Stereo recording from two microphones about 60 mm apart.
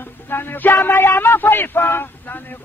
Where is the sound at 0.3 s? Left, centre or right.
Left.